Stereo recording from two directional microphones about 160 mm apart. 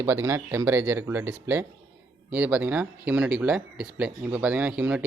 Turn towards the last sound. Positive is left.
turn(degrees=-5)  # may be behind; listen again after turning